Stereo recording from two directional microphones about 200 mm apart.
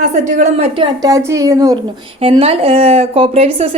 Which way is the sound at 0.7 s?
20° right (ahead or behind).